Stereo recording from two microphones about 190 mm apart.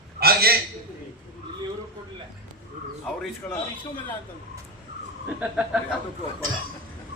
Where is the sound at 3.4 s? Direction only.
15° left (ahead or behind).